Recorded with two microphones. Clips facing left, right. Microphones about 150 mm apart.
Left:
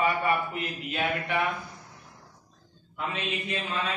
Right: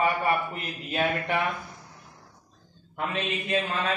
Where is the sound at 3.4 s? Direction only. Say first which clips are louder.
Right 6 dB; 50° right (ahead or behind).